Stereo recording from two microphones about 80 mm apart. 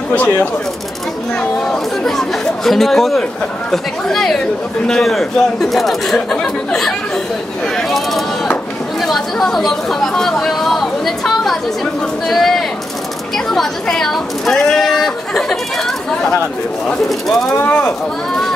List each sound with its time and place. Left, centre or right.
0.1 s speech: centre
2.0 s speech: centre
17.3 s speech: centre
17.6 s speech: left